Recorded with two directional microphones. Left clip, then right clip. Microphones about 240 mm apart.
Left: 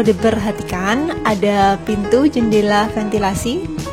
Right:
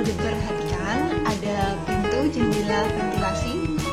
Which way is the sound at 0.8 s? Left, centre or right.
Left.